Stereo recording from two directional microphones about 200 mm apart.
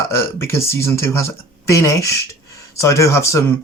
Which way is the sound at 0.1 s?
15° left (ahead or behind).